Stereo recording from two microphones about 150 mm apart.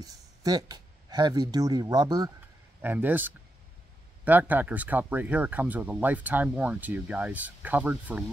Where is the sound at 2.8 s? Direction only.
10° right (ahead or behind).